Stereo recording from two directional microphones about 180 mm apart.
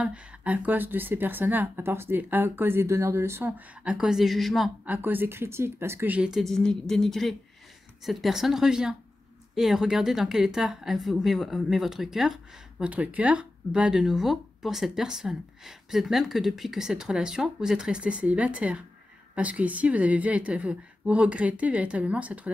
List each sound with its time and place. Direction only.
0.0 s a woman's voice: 5° right (ahead or behind)